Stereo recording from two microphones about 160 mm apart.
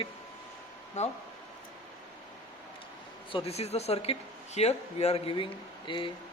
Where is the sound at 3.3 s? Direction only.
35° left (ahead or behind).